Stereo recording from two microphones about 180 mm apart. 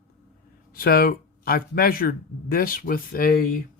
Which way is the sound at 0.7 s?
55° left (ahead or behind).